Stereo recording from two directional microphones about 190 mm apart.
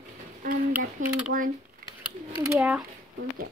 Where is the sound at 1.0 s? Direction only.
40° right (ahead or behind).